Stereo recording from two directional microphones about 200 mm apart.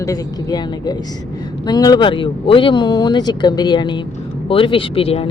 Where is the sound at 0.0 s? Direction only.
20° left (ahead or behind).